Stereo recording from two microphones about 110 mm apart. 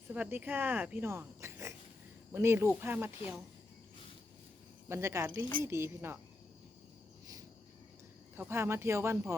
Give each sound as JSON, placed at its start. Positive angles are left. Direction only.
{"t": 0.1, "sound": "speech", "side_deg": -15}
{"t": 4.9, "sound": "speech", "side_deg": -25}
{"t": 8.4, "sound": "speech", "side_deg": -20}